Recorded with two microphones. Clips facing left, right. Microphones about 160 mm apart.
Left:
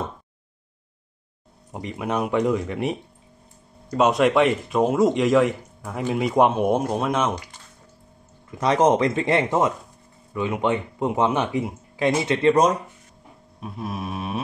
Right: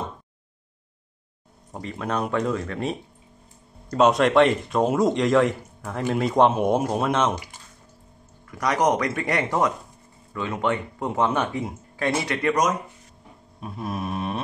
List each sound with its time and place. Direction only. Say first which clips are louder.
1.7 s speech: left 2 dB; 15° left (ahead or behind)
3.9 s speech: even; 5° left (ahead or behind)
8.5 s speech: left 3 dB; 25° left (ahead or behind)
13.6 s speech: right 1 dB; centre (ahead or behind)